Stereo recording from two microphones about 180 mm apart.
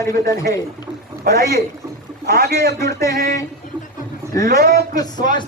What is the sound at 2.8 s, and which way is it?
Speech, 15° left (ahead or behind).